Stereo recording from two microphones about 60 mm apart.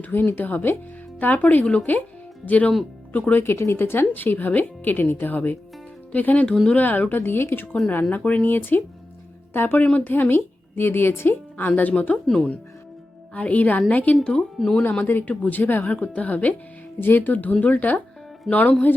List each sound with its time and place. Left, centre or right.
0.0 s speech: left
3.4 s speech: left
8.1 s speech: left
8.4 s speech: left
11.8 s speech: left
12.3 s speech: centre
13.3 s speech: left
14.6 s speech: centre
14.9 s speech: left
17.0 s speech: left